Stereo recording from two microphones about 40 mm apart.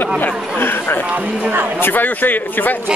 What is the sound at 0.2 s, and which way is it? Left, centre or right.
A man's voice, left.